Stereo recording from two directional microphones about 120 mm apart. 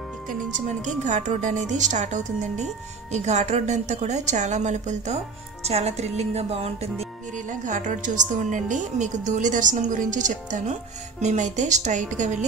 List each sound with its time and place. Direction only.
0.3 s a woman's voice: 90° right